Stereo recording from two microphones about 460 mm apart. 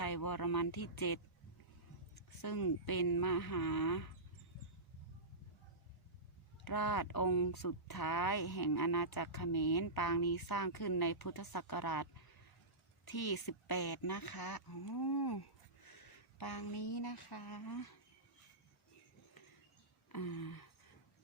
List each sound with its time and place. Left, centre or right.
0.0 s a sound: left
0.9 s speech: left
2.4 s speech: left
6.7 s speech: left
20.1 s speech: left